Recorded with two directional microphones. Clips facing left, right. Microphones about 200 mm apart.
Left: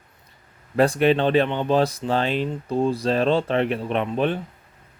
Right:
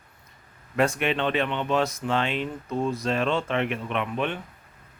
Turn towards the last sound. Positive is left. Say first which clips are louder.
# left 5 dB
turn(degrees=35)  # may be behind; listen again after turning